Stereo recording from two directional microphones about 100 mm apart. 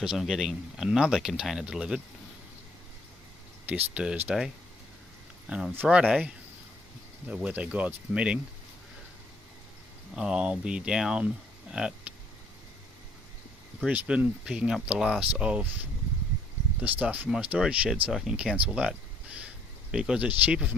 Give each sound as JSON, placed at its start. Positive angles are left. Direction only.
{"t": 0.0, "sound": "speech", "side_deg": -5}
{"t": 3.7, "sound": "speech", "side_deg": -15}
{"t": 10.2, "sound": "speech", "side_deg": -10}
{"t": 13.8, "sound": "speech", "side_deg": -15}